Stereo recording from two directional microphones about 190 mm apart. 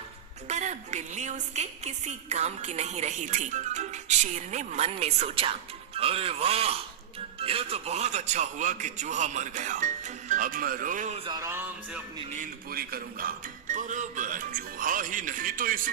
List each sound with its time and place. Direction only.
0.4 s a woman's voice: 40° right (ahead or behind)
11.2 s music: 20° right (ahead or behind)
12.3 s speech: 45° right (ahead or behind)